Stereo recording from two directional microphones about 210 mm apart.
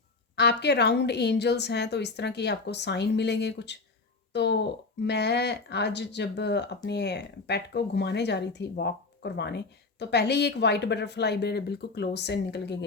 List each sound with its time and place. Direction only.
0.3 s speech: 50° left (ahead or behind)